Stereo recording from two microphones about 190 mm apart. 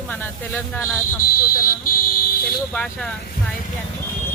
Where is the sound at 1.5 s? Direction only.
50° left (ahead or behind).